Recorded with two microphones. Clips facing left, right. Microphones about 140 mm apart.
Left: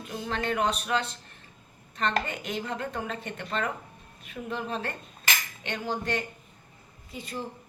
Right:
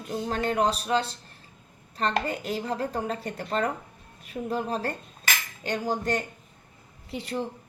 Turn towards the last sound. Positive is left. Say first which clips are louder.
# right 6 dB
turn(degrees=-70)  # may be behind; listen again after turning